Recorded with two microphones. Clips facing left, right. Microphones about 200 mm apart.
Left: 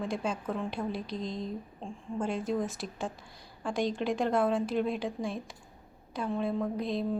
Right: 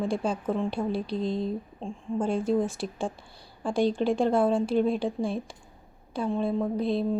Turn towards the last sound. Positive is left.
turn(degrees=-30)  # may be behind; listen again after turning